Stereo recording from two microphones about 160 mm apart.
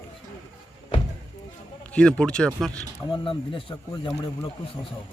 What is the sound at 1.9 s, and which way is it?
Speech, 5° left (ahead or behind).